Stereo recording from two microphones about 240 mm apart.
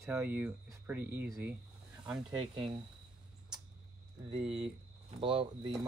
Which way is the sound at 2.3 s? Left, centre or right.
Right.